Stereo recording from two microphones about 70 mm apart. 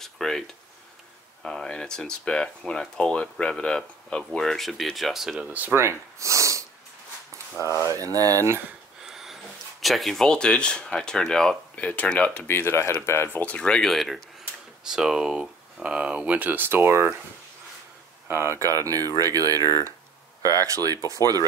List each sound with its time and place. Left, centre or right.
0.0 s speech: centre
5.5 s speech: right
5.8 s speech: right
7.5 s speech: left
7.9 s speech: right
9.0 s speech: centre
12.4 s speech: left
13.3 s speech: left
13.6 s speech: centre; by 17.1 s right
18.3 s speech: right
19.1 s speech: right